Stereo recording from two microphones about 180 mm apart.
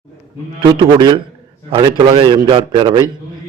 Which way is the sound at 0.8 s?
25° right (ahead or behind).